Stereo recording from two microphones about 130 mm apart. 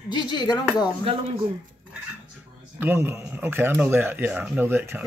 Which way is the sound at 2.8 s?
20° right (ahead or behind).